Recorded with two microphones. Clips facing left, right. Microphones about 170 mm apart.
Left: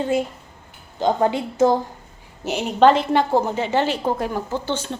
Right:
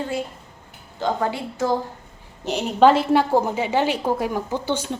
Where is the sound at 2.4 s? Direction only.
5° left (ahead or behind).